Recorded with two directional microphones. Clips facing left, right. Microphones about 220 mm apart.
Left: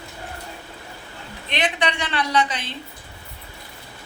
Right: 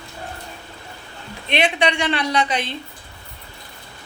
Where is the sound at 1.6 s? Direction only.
15° right (ahead or behind).